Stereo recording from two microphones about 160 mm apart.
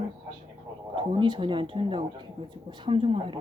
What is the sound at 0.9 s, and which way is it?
Speech, 35° right (ahead or behind).